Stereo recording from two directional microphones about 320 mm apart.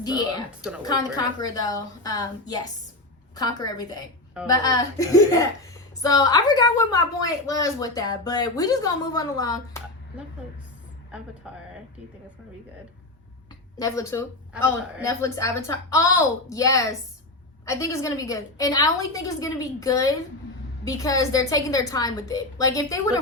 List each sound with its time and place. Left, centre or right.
0.0 s speech: centre
11.4 s a man's voice: centre
13.7 s speech: centre
14.5 s a man's voice: centre
15.2 s speech: centre